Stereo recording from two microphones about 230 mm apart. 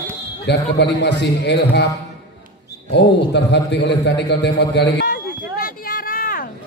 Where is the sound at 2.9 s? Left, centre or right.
Left.